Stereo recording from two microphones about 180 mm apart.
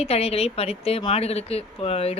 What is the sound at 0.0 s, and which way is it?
Speech, 35° left (ahead or behind).